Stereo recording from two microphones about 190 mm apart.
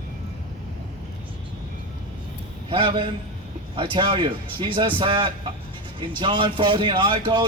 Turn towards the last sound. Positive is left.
turn(degrees=-25)  # may be behind; listen again after turning